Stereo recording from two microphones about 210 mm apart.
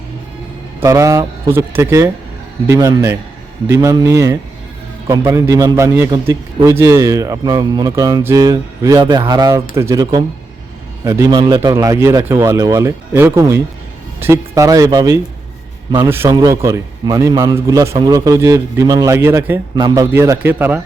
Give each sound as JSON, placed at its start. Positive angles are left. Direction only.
{"t": 0.8, "sound": "a man's voice", "side_deg": -15}